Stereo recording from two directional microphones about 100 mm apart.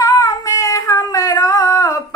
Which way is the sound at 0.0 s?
35° left (ahead or behind).